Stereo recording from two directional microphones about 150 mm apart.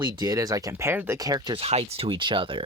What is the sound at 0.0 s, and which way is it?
Speech, 25° right (ahead or behind).